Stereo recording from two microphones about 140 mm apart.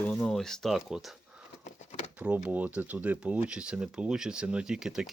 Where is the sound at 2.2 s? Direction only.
10° right (ahead or behind).